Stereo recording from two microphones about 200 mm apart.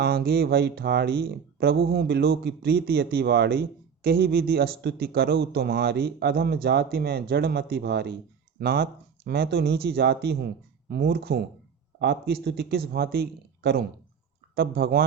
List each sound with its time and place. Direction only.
0.0 s speech: 50° right (ahead or behind)